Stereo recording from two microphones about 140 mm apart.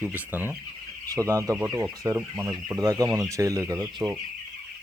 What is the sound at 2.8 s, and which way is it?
Speech, 25° right (ahead or behind).